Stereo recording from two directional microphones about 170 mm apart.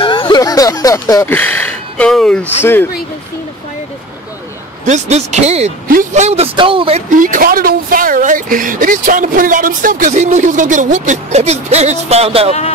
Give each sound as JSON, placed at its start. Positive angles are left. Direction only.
{"t": 0.0, "sound": "speech", "side_deg": 30}
{"t": 4.8, "sound": "speech", "side_deg": -45}
{"t": 5.9, "sound": "speech", "side_deg": -50}
{"t": 7.1, "sound": "speech", "side_deg": -50}